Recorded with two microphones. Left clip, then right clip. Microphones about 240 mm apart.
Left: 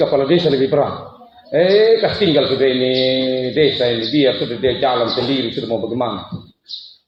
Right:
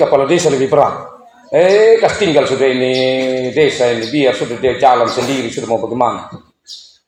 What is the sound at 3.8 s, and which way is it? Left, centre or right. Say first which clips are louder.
A man's voice: right 2 dB; right.